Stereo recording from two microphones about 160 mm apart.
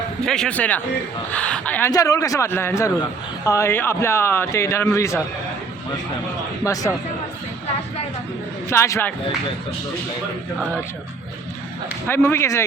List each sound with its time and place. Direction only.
0.3 s a man's voice: 5° left (ahead or behind)
1.9 s a man's voice: 20° left (ahead or behind)
8.7 s a man's voice: 15° left (ahead or behind)
12.0 s a man's voice: 15° left (ahead or behind)